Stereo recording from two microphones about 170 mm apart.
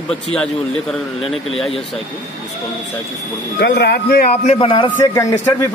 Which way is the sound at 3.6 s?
80° left.